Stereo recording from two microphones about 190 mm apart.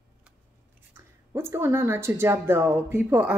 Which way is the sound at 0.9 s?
15° right (ahead or behind).